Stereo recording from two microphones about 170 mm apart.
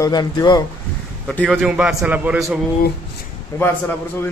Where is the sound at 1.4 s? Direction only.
5° right (ahead or behind).